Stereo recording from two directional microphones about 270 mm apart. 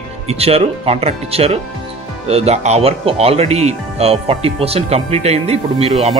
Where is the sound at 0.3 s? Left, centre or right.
Right.